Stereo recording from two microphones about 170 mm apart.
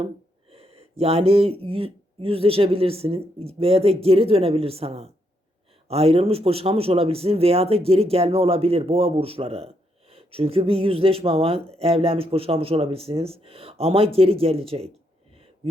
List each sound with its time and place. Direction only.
0.5 s speech: 35° right (ahead or behind)